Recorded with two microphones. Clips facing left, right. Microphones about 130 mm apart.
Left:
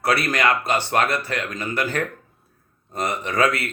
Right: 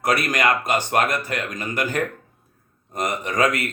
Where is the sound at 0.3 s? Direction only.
15° right (ahead or behind).